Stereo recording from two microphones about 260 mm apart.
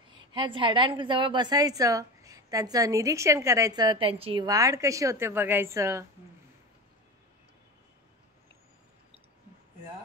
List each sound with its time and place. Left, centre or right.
0.1 s a woman's voice: centre